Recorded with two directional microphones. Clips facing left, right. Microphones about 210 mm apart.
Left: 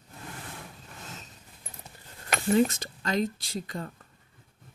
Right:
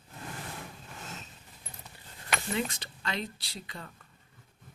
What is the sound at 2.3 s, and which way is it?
Speech, 45° left (ahead or behind).